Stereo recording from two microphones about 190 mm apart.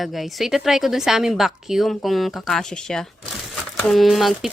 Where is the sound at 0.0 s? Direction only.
Centre (ahead or behind).